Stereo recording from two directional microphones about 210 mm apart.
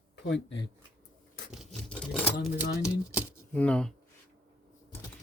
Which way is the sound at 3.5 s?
5° left (ahead or behind).